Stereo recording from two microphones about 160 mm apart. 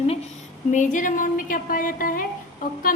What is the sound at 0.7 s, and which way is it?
A woman's voice, 50° left (ahead or behind).